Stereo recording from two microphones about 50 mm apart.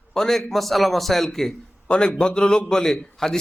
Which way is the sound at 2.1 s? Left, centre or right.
Centre.